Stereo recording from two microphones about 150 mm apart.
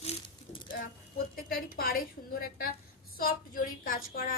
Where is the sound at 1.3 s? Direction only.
75° left (ahead or behind).